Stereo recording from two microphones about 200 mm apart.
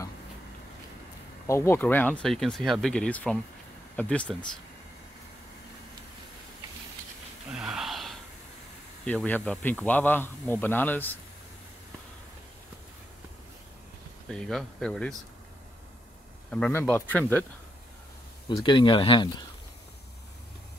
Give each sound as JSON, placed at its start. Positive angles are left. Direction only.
{"t": 1.5, "sound": "a man's voice", "side_deg": 10}
{"t": 7.5, "sound": "gasp", "side_deg": -5}
{"t": 9.0, "sound": "a man's voice", "side_deg": 5}
{"t": 14.3, "sound": "speech", "side_deg": 5}
{"t": 16.4, "sound": "a man's voice", "side_deg": 5}
{"t": 18.6, "sound": "speech", "side_deg": 25}